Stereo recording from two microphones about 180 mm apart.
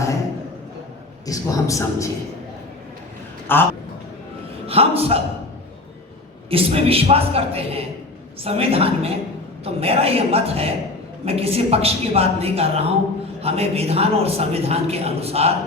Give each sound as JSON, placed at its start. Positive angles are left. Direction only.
{"t": 1.3, "sound": "speech", "side_deg": 20}
{"t": 3.4, "sound": "a man's voice", "side_deg": 10}
{"t": 4.6, "sound": "a man's voice", "side_deg": -35}
{"t": 6.5, "sound": "a man's voice", "side_deg": -30}